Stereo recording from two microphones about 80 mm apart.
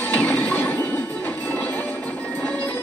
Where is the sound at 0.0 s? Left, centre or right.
Left.